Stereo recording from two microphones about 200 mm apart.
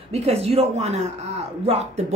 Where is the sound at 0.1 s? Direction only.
30° right (ahead or behind).